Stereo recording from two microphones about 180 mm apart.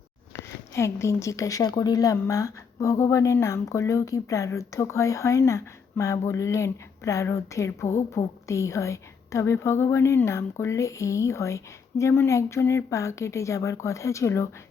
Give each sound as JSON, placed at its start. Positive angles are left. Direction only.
{"t": 0.3, "sound": "speech", "side_deg": 15}